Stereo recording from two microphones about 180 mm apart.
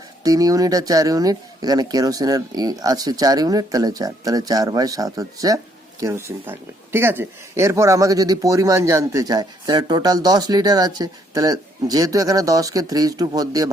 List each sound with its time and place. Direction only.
0.2 s speech: 20° right (ahead or behind)